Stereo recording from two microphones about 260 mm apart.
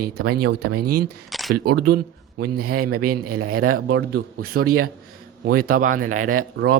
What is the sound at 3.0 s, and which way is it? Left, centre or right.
Speech, right.